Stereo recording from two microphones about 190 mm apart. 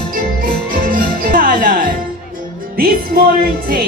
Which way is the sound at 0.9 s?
45° right (ahead or behind).